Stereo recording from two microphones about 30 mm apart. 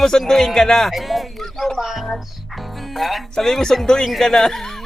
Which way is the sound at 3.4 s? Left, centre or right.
Centre.